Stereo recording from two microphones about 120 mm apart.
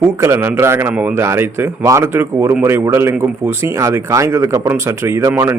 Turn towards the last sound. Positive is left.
turn(degrees=-20)  # may be behind; listen again after turning